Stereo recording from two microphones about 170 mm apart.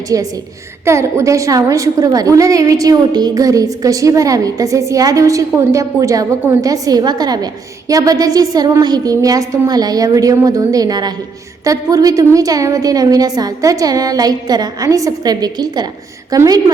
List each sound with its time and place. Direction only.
0.1 s a woman's voice: 20° right (ahead or behind)